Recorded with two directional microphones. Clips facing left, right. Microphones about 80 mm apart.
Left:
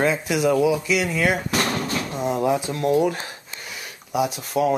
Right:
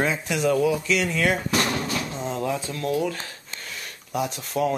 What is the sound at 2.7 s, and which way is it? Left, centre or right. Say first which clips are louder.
Speech: left 5 dB; left.